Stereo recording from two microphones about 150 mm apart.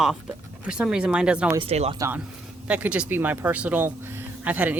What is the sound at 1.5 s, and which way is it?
Speech, 40° right (ahead or behind).